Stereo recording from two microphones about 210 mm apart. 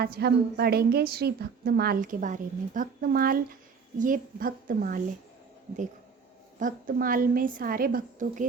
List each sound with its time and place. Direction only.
0.0 s a woman's voice: 50° right (ahead or behind)
6.6 s a woman's voice: 40° right (ahead or behind)